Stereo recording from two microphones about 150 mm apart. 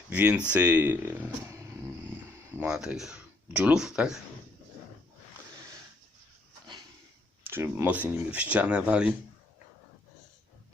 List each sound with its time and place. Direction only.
0.1 s speech: 10° right (ahead or behind)
2.6 s speech: 5° right (ahead or behind)
7.4 s speech: 15° right (ahead or behind)